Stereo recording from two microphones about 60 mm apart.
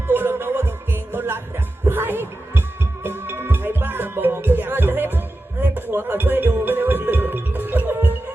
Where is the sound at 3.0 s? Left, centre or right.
Right.